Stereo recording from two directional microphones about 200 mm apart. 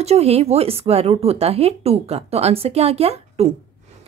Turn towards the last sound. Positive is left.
turn(degrees=-30)  # may be behind; listen again after turning